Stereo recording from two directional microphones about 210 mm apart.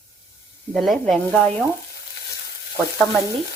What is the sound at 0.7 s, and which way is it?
Speech, centre (ahead or behind).